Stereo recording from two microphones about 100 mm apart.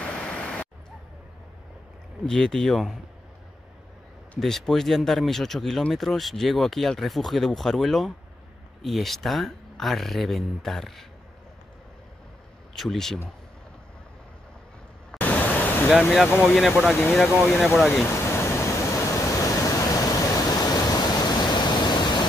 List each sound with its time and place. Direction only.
0.0 s a sound: 10° left (ahead or behind)
2.2 s speech: 5° left (ahead or behind)
4.4 s speech: 5° left (ahead or behind)
12.7 s speech: 5° left (ahead or behind)
15.1 s vehicle: 15° left (ahead or behind)
15.9 s speech: centre (ahead or behind)
18.0 s pink noise: 25° left (ahead or behind); by 22.2 s 45° left (ahead or behind)